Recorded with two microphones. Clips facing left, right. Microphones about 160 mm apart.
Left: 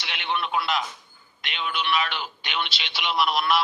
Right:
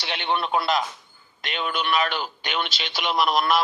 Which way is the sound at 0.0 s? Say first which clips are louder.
Right 3 dB; 35° right (ahead or behind).